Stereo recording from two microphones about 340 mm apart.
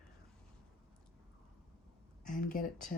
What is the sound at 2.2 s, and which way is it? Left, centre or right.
Speech, left.